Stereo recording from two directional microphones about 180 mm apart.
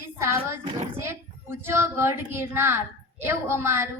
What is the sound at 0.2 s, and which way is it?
A woman's voice, 15° right (ahead or behind).